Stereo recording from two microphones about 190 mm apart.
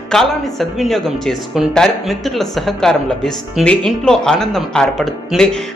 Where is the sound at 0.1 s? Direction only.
Centre (ahead or behind).